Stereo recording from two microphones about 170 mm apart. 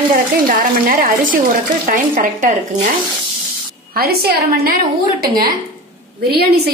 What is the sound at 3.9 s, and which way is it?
Speech, 65° right (ahead or behind).